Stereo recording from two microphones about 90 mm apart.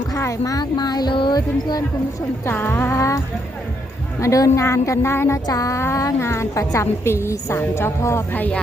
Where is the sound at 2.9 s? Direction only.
35° left (ahead or behind).